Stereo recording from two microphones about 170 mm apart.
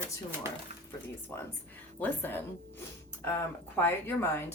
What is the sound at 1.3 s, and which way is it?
Speech, 15° left (ahead or behind).